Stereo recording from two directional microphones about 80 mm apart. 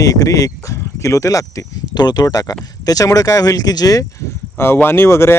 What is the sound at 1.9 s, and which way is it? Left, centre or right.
Speech, left.